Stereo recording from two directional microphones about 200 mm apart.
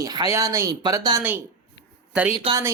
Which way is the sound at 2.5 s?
25° right (ahead or behind).